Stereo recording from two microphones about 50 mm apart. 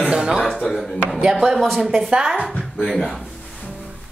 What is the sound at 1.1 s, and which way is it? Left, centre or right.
Speech, centre.